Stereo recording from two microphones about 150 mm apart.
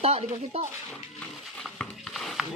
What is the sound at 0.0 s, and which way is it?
Speech, 45° right (ahead or behind).